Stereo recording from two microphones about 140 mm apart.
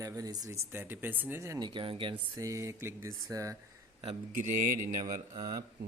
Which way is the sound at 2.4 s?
20° right (ahead or behind).